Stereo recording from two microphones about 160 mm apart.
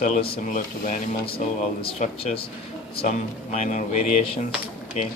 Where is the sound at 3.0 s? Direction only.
45° left (ahead or behind).